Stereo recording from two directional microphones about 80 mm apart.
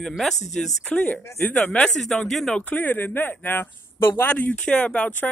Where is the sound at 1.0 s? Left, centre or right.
Centre.